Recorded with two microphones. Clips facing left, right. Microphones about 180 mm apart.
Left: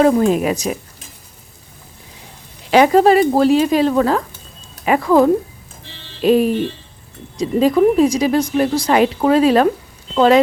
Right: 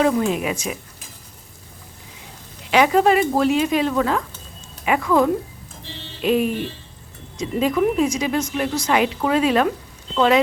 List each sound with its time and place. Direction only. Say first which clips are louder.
0.0 s speech: left 6 dB; 40° left (ahead or behind)
2.6 s speech: left 5 dB; 35° left (ahead or behind)